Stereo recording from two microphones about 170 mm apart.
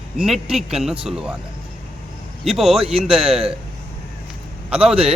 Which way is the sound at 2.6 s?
Centre (ahead or behind).